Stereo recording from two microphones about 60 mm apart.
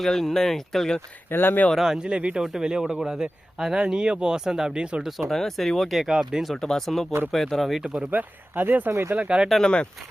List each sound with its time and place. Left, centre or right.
0.0 s speech: centre
1.3 s speech: left
1.7 s speech: centre
5.3 s speech: centre
6.1 s speech: centre
6.5 s speech: centre
7.9 s speech: right
8.9 s speech: right
9.1 s speech: centre
9.5 s speech: centre